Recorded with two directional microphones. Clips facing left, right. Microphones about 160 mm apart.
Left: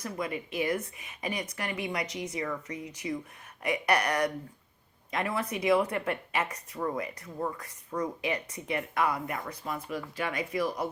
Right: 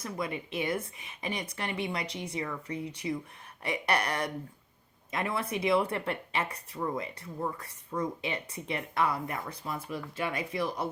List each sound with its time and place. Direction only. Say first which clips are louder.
0.0 s speech: left 1 dB; 30° right (ahead or behind)